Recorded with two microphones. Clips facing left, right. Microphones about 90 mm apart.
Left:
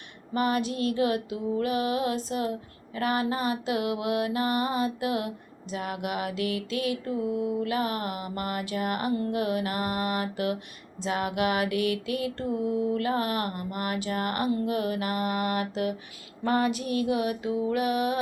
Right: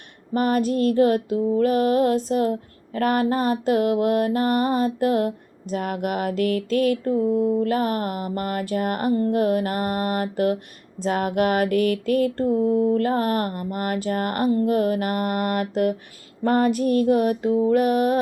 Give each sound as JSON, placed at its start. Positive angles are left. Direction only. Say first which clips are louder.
{"t": 0.3, "sound": "music", "louder": "right 6 dB", "side_deg": -45}